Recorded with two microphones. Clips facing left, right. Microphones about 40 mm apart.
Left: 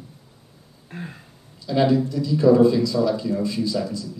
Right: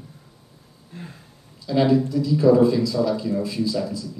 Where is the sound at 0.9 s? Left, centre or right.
Left.